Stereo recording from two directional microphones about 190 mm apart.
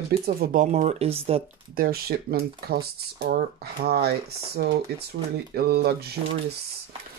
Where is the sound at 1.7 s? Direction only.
50° right (ahead or behind).